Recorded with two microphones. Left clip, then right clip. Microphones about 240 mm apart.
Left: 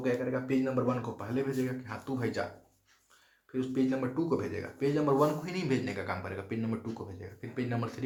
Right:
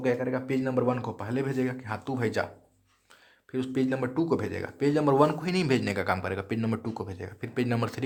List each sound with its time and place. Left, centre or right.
0.0 s speech: right
3.5 s speech: right